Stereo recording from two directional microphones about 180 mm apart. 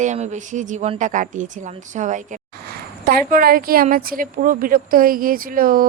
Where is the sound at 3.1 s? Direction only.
55° right (ahead or behind).